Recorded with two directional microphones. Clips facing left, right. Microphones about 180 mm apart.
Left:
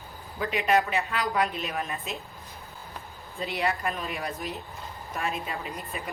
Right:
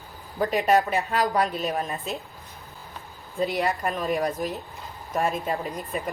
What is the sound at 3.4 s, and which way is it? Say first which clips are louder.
A woman's voice: right 4 dB; 40° right (ahead or behind).